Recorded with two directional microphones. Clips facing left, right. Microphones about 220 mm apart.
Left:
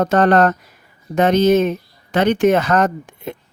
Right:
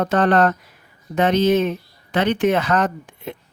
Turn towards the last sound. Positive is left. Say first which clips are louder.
# left 3 dB
turn(degrees=45)  # may be behind; listen again after turning